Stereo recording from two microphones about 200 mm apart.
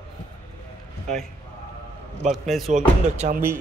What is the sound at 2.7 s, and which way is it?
Speech, 40° right (ahead or behind).